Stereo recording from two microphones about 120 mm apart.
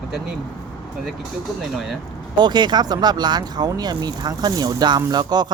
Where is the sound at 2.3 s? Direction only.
40° right (ahead or behind).